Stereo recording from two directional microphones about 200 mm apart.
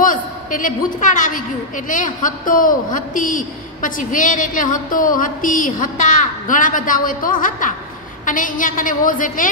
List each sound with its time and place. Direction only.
0.0 s a man's voice: 40° left (ahead or behind)